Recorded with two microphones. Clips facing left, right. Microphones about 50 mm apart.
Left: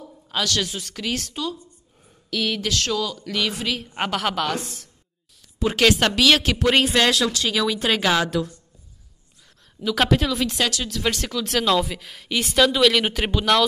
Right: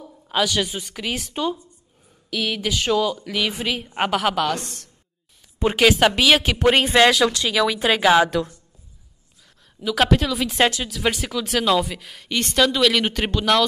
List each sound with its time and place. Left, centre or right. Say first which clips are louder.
0.0 s a woman's voice: right 4 dB; centre
1.3 s a woman's voice: right 4 dB; right
2.3 s a woman's voice: even; centre
5.8 s a woman's voice: right 2 dB; centre
6.6 s a woman's voice: right 3 dB; right
9.8 s speech: right 1 dB; centre